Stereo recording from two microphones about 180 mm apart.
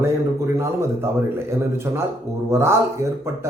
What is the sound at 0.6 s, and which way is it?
Speech, 15° right (ahead or behind).